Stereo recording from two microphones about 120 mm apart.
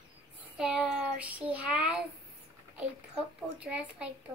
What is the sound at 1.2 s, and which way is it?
Speech, 10° right (ahead or behind).